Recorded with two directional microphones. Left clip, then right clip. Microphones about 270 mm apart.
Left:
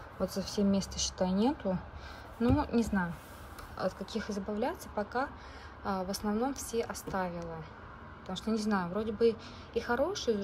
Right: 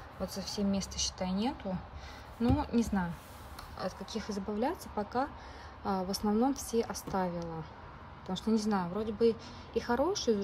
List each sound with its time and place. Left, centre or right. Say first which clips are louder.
0.2 s speech: left 4 dB; centre